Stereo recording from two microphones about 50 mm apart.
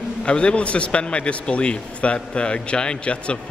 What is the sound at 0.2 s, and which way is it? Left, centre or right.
A man's voice, centre.